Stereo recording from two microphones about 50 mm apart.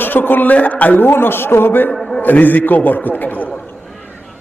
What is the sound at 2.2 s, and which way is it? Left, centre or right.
A man's voice, left.